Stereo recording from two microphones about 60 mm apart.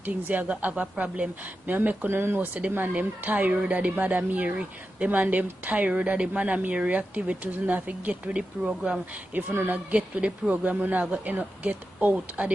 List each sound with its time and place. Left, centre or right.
0.0 s a woman's voice: right
9.3 s a woman's voice: right